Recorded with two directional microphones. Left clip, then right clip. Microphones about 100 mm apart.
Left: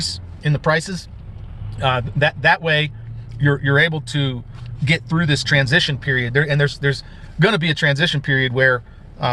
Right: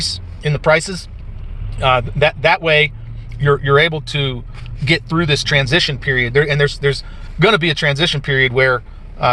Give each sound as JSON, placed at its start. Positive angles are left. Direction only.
{"t": 0.0, "sound": "speech", "side_deg": 25}